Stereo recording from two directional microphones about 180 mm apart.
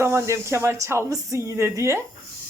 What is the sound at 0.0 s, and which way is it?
Speech, 15° right (ahead or behind).